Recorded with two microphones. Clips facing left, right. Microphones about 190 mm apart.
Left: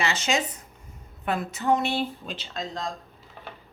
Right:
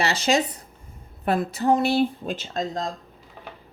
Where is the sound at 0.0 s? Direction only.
35° right (ahead or behind).